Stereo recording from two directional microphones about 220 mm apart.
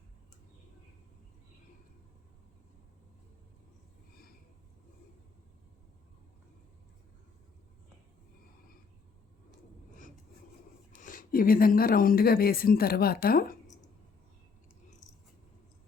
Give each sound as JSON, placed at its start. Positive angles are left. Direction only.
{"t": 10.9, "sound": "speech", "side_deg": 35}